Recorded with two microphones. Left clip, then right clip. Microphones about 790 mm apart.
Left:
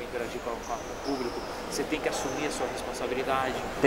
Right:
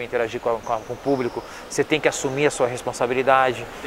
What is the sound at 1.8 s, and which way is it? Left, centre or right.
Speech, right.